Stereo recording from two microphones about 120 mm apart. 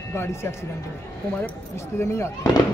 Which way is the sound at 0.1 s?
20° left (ahead or behind).